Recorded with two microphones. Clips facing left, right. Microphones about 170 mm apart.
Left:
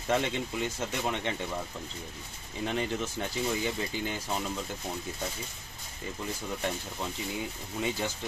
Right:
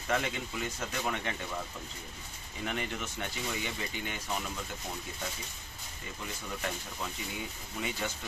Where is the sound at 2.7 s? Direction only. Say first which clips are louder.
Left 5 dB; 30° left (ahead or behind).